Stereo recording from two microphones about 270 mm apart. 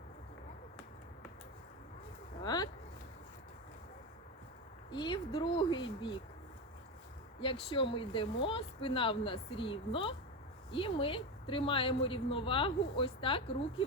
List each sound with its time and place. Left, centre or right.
2.4 s a sound: centre
4.9 s speech: centre
7.4 s a woman's voice: centre